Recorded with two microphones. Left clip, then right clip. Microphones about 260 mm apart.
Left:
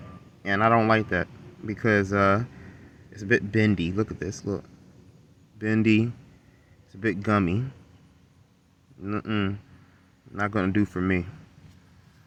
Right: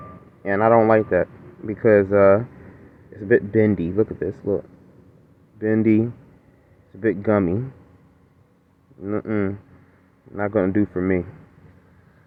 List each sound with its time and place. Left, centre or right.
0.4 s speech: left
7.0 s speech: left
9.0 s speech: left